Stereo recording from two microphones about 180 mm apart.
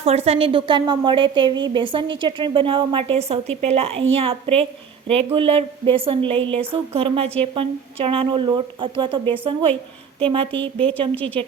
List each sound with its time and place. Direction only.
0.0 s a woman's voice: 35° right (ahead or behind)
11.1 s a woman's voice: 10° left (ahead or behind)